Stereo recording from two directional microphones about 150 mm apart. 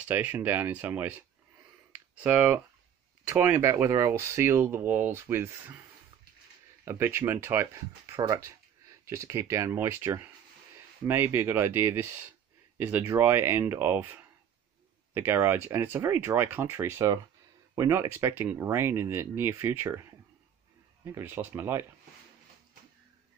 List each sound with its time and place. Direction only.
0.1 s speech: 10° right (ahead or behind)
1.9 s a sound: 10° right (ahead or behind)
3.3 s speech: 15° right (ahead or behind)
6.8 s speech: 15° right (ahead or behind)